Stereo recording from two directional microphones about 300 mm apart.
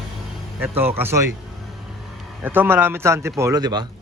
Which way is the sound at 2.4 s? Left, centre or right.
Centre.